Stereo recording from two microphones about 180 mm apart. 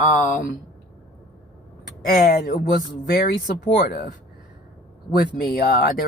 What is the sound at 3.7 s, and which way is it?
Speech, 55° left (ahead or behind).